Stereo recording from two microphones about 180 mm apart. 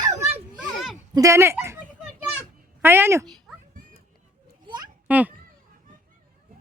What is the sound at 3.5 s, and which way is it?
Music, 5° right (ahead or behind).